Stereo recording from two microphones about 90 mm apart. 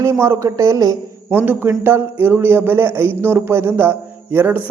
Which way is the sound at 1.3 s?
20° right (ahead or behind).